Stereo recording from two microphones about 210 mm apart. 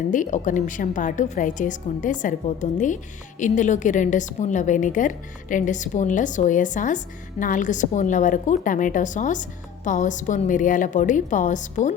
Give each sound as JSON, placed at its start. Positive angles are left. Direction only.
{"t": 0.1, "sound": "a woman's voice", "side_deg": 40}